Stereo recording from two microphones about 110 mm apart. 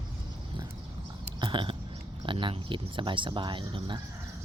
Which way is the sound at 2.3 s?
50° right (ahead or behind).